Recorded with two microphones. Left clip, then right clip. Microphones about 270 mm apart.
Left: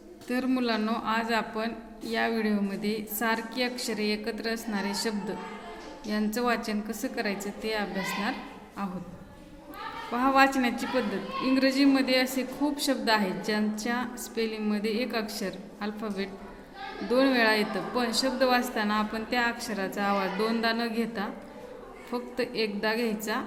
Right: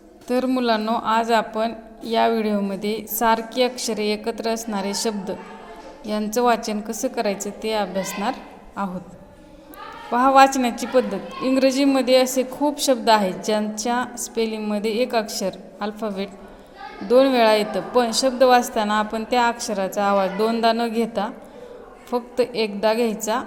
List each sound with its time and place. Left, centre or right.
0.3 s a woman's voice: centre
10.1 s a woman's voice: centre